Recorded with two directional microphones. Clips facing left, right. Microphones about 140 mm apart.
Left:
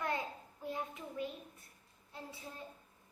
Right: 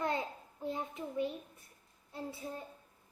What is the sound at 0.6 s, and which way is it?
Speech, 25° right (ahead or behind).